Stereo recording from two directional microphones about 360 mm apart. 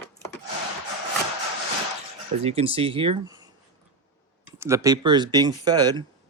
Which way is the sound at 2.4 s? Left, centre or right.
Centre.